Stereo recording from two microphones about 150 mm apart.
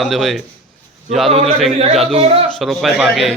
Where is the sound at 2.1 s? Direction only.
40° right (ahead or behind).